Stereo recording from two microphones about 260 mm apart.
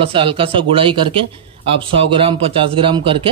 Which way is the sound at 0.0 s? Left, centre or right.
Right.